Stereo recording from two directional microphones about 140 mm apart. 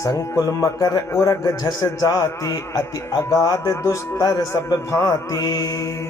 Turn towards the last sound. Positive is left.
turn(degrees=25)  # may be behind; listen again after turning